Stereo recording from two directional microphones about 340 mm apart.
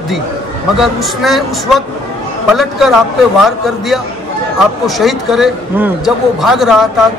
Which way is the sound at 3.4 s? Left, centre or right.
Centre.